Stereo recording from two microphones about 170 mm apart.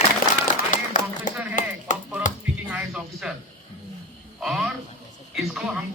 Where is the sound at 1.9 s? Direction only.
50° left (ahead or behind).